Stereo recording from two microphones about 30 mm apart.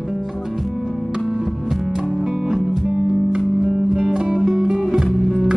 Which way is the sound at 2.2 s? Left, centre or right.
Right.